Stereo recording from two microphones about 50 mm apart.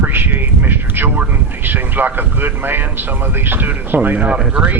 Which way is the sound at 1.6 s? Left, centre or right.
Right.